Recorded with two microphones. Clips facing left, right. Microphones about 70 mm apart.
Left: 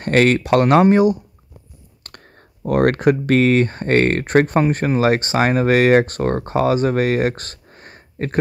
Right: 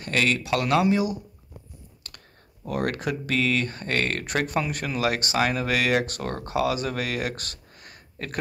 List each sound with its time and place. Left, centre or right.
0.0 s speech: left